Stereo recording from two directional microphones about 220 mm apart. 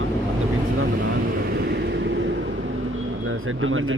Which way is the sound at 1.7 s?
50° right (ahead or behind).